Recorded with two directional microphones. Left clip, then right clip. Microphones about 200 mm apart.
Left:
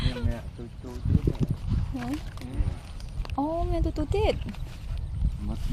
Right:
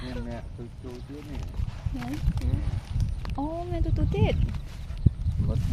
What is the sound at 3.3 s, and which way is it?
Speech, 45° left (ahead or behind).